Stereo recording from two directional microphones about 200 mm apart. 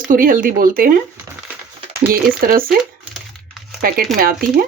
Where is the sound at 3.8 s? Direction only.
45° right (ahead or behind).